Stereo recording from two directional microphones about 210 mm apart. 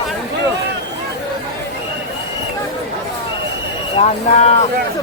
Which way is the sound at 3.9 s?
30° left (ahead or behind).